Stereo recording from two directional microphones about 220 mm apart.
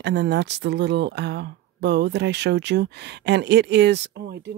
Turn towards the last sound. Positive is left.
turn(degrees=-50)  # may be behind; listen again after turning